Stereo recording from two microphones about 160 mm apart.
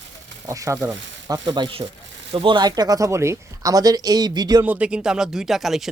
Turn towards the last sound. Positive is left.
turn(degrees=0)  # may be behind; listen again after turning